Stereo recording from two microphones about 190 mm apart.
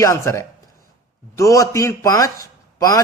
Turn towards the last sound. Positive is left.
turn(degrees=20)  # may be behind; listen again after turning